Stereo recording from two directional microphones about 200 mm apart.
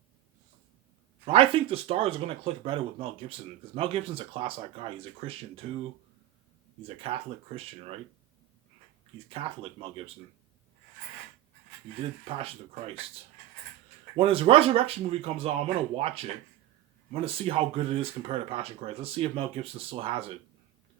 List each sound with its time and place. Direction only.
1.2 s speech: 30° right (ahead or behind)
6.8 s speech: 30° right (ahead or behind)
9.3 s speech: 30° right (ahead or behind)
14.2 s speech: 30° right (ahead or behind)